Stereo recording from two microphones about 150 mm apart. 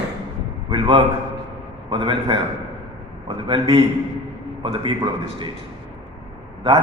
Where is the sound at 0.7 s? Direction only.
35° right (ahead or behind).